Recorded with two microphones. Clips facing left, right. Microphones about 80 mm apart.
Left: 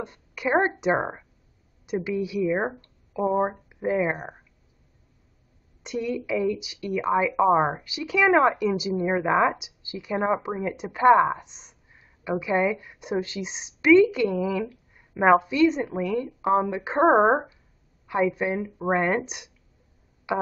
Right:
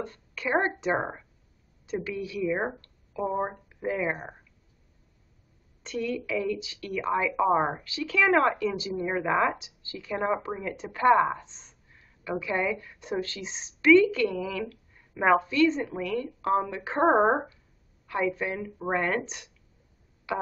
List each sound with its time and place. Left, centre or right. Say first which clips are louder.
0.0 s a woman's voice: left 4 dB; centre
5.9 s speech: left 3 dB; centre